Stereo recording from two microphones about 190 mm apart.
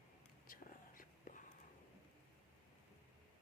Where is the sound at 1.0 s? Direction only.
45° left (ahead or behind).